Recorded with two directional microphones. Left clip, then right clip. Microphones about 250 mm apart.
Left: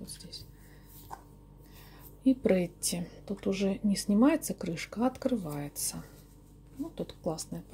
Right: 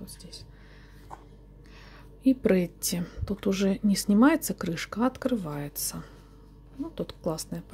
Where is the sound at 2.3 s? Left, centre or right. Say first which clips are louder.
Right 3 dB; centre.